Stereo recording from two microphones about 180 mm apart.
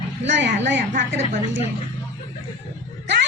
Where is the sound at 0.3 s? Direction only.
85° right.